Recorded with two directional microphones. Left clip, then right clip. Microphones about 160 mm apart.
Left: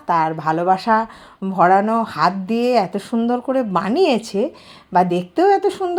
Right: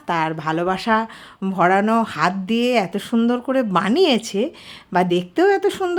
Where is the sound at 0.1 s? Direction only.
15° right (ahead or behind).